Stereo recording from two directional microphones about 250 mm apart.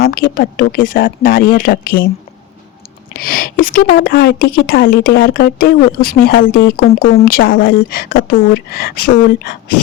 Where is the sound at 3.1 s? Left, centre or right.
Left.